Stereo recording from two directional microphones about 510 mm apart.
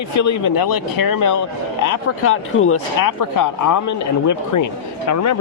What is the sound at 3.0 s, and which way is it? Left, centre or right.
Speech, left.